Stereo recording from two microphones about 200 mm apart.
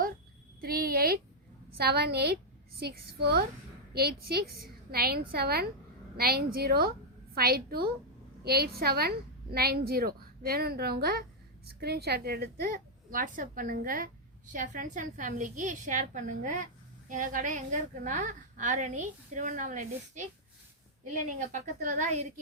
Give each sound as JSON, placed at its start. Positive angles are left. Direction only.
{"t": 0.6, "sound": "a sound", "side_deg": -50}
{"t": 1.8, "sound": "a woman's voice", "side_deg": -55}
{"t": 21.5, "sound": "a woman's voice", "side_deg": -40}